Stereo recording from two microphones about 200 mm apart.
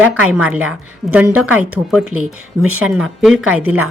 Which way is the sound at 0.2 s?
5° right (ahead or behind).